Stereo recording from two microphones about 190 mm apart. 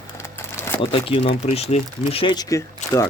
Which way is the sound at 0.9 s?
30° left (ahead or behind).